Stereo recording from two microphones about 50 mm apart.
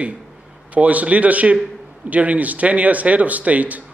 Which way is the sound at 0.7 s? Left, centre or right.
Right.